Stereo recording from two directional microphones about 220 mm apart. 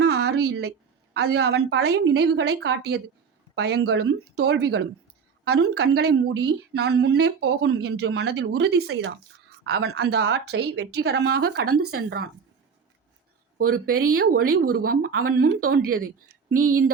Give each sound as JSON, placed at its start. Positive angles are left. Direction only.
{"t": 0.0, "sound": "a sound", "side_deg": -50}
{"t": 1.1, "sound": "a woman's voice", "side_deg": -50}
{"t": 13.7, "sound": "a woman's voice", "side_deg": -40}